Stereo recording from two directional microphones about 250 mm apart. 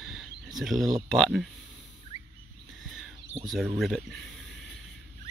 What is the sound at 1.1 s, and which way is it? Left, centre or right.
Speech, centre.